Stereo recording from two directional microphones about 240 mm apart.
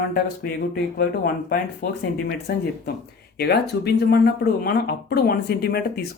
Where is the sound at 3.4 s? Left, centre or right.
Left.